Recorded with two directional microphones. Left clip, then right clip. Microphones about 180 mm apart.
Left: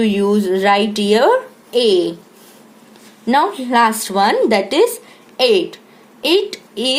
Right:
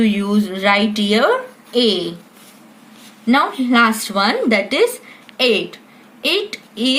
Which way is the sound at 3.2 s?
45° left (ahead or behind).